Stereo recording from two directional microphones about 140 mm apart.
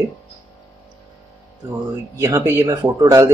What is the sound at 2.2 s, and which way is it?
Speech, 20° right (ahead or behind).